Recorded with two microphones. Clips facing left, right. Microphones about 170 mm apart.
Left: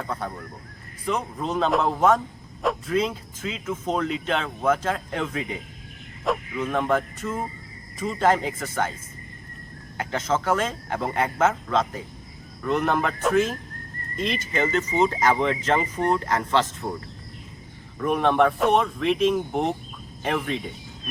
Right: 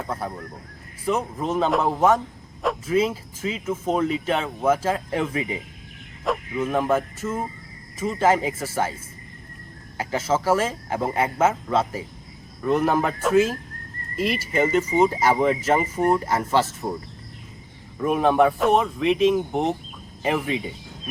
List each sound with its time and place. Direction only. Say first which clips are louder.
0.1 s speech: right 1 dB; 5° right (ahead or behind)
10.0 s speech: right 2 dB; 10° right (ahead or behind)
18.0 s speech: right 2 dB; 5° right (ahead or behind)